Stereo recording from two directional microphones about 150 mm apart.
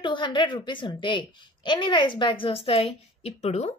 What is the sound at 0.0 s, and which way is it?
A child's voice, 30° left (ahead or behind).